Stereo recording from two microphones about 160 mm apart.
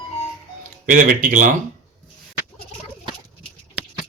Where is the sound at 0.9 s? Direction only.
60° right (ahead or behind).